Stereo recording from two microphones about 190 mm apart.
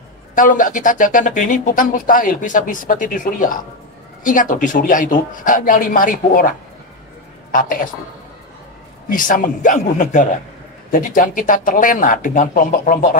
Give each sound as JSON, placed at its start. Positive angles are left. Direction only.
{"t": 0.3, "sound": "speech", "side_deg": 45}
{"t": 7.5, "sound": "speech", "side_deg": 45}
{"t": 9.1, "sound": "speech", "side_deg": 45}